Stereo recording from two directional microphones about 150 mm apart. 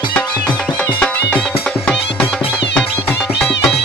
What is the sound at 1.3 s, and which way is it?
Music, 10° left (ahead or behind).